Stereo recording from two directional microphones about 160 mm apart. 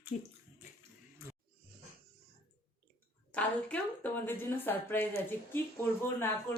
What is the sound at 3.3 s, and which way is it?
A woman's voice, 10° left (ahead or behind).